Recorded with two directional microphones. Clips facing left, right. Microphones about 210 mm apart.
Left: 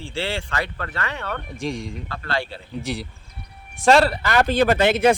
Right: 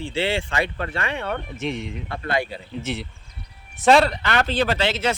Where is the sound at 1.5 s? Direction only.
5° right (ahead or behind).